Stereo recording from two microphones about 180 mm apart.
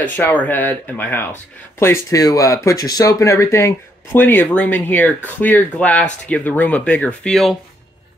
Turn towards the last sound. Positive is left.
turn(degrees=0)  # may be behind; listen again after turning